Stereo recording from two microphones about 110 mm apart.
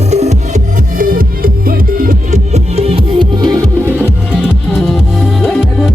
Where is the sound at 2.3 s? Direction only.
75° right (ahead or behind).